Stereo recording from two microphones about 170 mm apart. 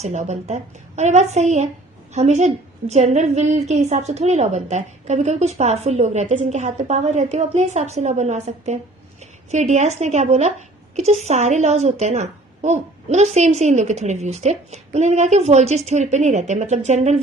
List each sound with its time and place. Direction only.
0.0 s a woman's voice: 45° right (ahead or behind)